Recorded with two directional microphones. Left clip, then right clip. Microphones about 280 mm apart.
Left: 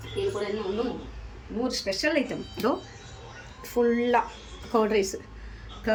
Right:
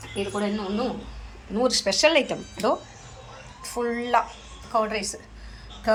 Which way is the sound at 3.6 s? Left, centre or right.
Centre.